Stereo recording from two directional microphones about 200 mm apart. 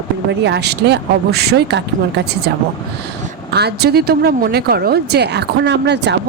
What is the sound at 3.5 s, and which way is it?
A woman's voice, 55° right (ahead or behind).